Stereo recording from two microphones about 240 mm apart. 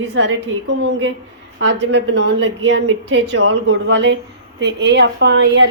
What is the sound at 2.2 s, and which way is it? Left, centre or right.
A woman's voice, right.